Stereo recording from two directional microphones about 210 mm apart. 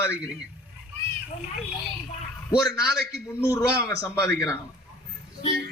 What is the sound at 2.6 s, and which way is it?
A man's voice, 20° left (ahead or behind).